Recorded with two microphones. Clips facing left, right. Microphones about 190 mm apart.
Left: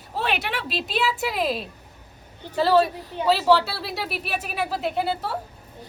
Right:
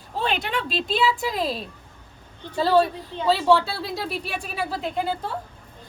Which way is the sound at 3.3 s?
70° left (ahead or behind).